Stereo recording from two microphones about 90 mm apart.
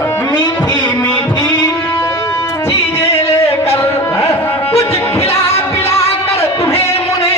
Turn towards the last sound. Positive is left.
turn(degrees=30)  # may be behind; listen again after turning